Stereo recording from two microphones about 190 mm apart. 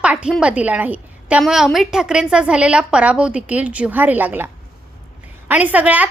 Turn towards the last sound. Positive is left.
turn(degrees=-10)  # may be behind; listen again after turning